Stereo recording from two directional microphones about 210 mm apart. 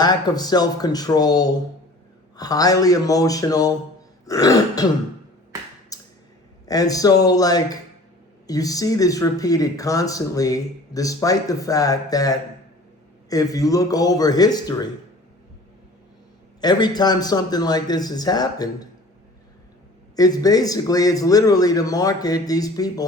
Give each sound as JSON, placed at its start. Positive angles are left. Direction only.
{"t": 0.0, "sound": "a man's voice", "side_deg": 20}
{"t": 5.9, "sound": "a sound", "side_deg": 15}
{"t": 6.7, "sound": "speech", "side_deg": 15}
{"t": 16.6, "sound": "a man's voice", "side_deg": 20}
{"t": 20.1, "sound": "speech", "side_deg": 15}